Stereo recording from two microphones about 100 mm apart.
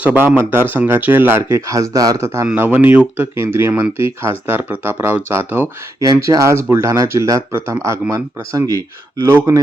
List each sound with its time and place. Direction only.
0.0 s speech: 20° right (ahead or behind)
2.6 s speech: 20° right (ahead or behind)
3.3 s speech: 25° right (ahead or behind)